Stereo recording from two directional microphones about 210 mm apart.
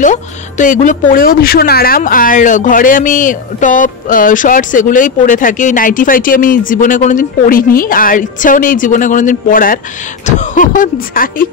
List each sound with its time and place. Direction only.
0.0 s speech: 35° left (ahead or behind)